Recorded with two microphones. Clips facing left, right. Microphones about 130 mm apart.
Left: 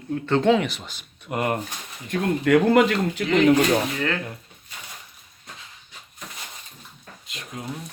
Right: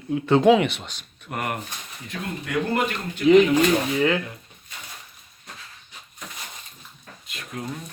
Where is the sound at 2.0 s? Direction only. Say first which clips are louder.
Left 11 dB; 70° left (ahead or behind); by 3.2 s 90° left.